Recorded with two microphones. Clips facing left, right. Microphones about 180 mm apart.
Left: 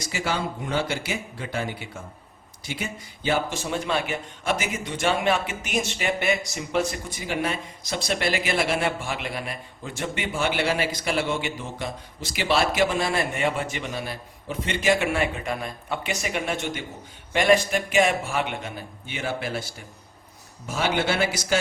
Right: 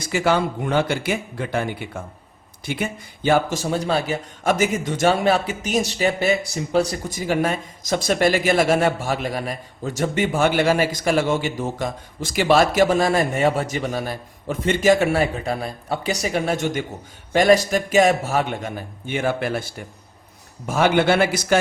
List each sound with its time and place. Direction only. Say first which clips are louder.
0.0 s a man's voice: right 8 dB; 55° right (ahead or behind)
3.2 s a man's voice: right 6 dB; 45° right (ahead or behind)